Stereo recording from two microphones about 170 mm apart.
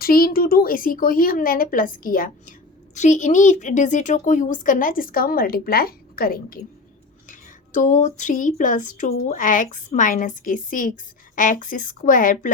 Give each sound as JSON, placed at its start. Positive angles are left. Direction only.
{"t": 0.0, "sound": "a woman's voice", "side_deg": 60}
{"t": 7.3, "sound": "speech", "side_deg": 50}